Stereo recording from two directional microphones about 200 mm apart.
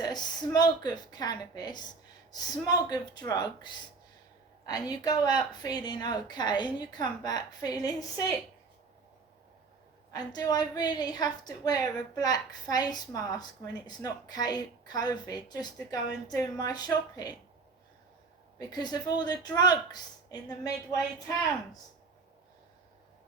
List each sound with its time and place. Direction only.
0.0 s a woman's voice: 20° left (ahead or behind)
10.1 s a woman's voice: 20° left (ahead or behind)
18.6 s a woman's voice: 20° left (ahead or behind)